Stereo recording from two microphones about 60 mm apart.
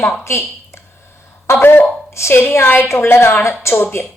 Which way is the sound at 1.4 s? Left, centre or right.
Left.